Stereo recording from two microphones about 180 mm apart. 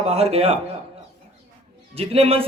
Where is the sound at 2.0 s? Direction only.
35° right (ahead or behind).